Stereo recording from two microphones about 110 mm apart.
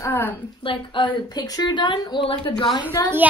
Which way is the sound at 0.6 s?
50° left (ahead or behind).